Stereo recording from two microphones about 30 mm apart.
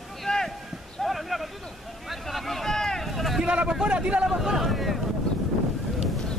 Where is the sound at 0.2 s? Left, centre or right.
Centre.